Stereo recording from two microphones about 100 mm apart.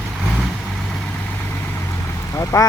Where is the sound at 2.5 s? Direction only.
25° left (ahead or behind).